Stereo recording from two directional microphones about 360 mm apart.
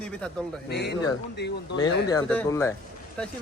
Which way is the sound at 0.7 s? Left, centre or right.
Left.